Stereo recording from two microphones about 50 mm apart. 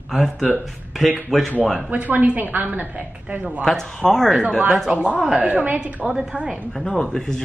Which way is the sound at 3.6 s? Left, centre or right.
Centre.